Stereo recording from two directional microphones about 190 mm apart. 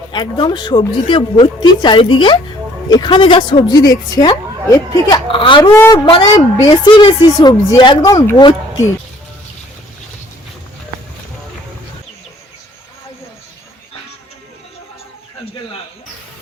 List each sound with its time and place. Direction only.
0.1 s a woman's voice: 20° left (ahead or behind)
5.7 s a man's voice: 15° left (ahead or behind)